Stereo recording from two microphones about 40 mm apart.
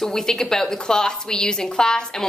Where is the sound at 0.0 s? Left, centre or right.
Centre.